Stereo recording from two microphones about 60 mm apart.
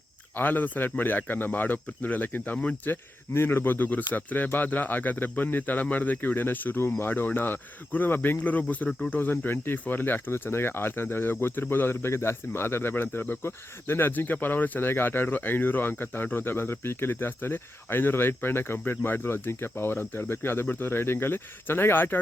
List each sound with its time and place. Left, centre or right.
0.3 s speech: left
2.9 s speech: left